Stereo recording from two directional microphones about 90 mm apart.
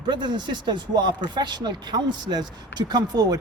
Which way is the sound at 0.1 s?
60° right (ahead or behind).